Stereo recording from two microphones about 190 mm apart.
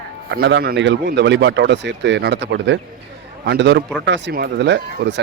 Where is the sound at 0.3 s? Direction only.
65° right (ahead or behind).